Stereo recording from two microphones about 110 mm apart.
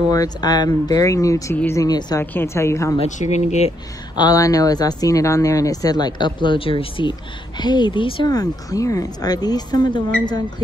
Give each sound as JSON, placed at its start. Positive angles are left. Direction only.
{"t": 0.1, "sound": "speech", "side_deg": 35}
{"t": 2.3, "sound": "a woman's voice", "side_deg": 25}
{"t": 4.1, "sound": "speech", "side_deg": 40}
{"t": 8.3, "sound": "speech", "side_deg": 35}